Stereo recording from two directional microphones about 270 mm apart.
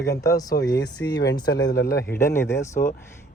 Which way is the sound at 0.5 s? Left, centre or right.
Left.